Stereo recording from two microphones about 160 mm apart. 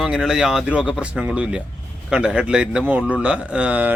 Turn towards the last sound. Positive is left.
turn(degrees=-10)  # may be behind; listen again after turning